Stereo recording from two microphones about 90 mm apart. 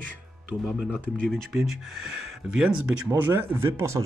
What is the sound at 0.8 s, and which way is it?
Speech, 15° left (ahead or behind).